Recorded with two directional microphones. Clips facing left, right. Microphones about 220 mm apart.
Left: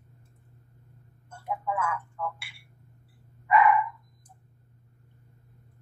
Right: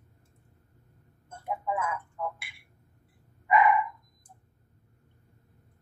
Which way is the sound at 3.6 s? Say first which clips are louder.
Left 1 dB; 25° right (ahead or behind).